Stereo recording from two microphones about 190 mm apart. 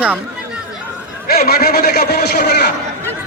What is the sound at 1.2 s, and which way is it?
Speech, 55° left (ahead or behind).